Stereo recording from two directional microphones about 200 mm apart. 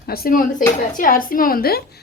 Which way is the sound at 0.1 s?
45° left (ahead or behind).